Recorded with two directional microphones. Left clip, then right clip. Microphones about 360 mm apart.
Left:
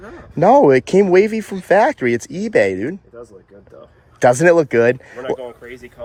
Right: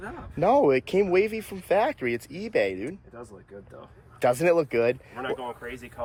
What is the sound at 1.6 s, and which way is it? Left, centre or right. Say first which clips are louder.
Speech: left 10 dB; left.